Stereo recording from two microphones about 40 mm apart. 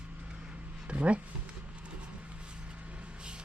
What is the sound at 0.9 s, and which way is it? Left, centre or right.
Speech, right.